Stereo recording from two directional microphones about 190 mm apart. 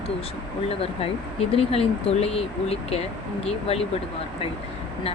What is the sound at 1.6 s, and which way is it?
Speech, 30° left (ahead or behind).